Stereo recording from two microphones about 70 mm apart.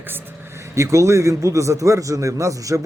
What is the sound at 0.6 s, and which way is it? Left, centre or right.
A man's voice, right.